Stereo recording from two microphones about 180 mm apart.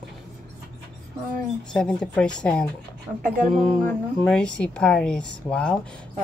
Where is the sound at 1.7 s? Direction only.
5° left (ahead or behind).